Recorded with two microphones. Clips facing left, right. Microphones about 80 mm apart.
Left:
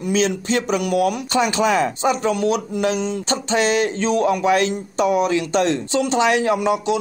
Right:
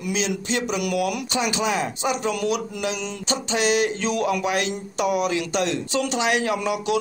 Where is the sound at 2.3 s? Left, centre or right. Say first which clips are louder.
Left 5 dB; left.